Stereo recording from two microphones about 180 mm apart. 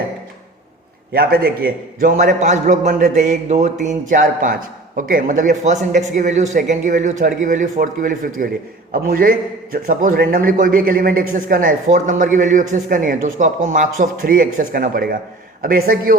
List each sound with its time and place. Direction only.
1.1 s a man's voice: 60° right (ahead or behind)